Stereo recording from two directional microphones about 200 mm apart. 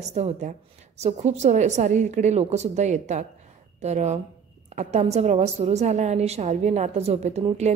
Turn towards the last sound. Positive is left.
turn(degrees=-35)  # may be behind; listen again after turning